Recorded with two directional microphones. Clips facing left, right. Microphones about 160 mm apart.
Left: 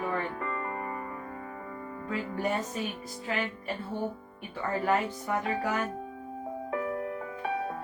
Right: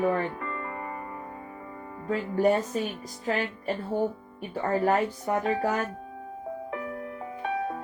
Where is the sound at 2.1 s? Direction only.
40° right (ahead or behind).